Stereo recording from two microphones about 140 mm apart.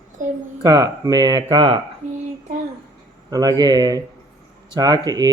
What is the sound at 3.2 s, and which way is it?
Speech, 30° right (ahead or behind).